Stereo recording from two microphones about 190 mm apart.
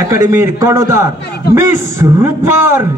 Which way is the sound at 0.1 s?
15° right (ahead or behind).